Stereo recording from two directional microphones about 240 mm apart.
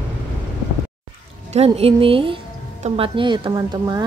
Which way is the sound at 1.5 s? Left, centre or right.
Right.